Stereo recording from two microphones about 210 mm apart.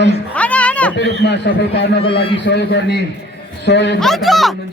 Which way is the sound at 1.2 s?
55° left (ahead or behind).